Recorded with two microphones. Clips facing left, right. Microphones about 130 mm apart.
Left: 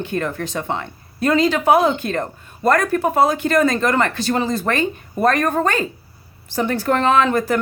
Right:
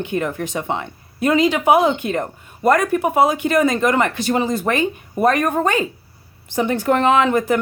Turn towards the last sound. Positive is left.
turn(degrees=-15)  # may be behind; listen again after turning